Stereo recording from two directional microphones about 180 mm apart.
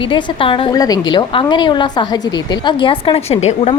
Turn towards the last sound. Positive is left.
turn(degrees=35)  # may be behind; listen again after turning